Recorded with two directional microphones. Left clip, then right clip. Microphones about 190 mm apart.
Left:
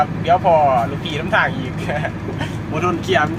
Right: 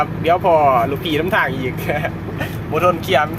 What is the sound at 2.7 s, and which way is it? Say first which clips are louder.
Speech: right 3 dB; 25° right (ahead or behind).